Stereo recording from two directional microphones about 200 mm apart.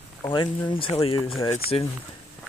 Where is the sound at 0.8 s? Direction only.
30° left (ahead or behind).